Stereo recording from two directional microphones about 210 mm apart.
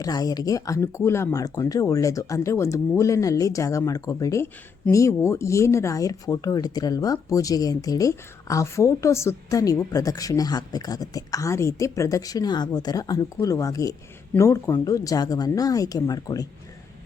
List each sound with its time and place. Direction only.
0.0 s speech: 15° left (ahead or behind)